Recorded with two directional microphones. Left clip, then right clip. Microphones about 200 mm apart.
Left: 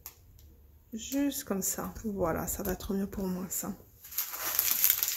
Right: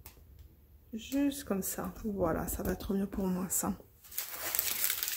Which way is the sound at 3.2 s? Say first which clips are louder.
Right 1 dB; 15° right (ahead or behind).